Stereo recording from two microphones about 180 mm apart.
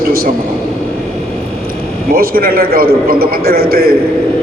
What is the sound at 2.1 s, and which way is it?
A man's voice, 55° right (ahead or behind).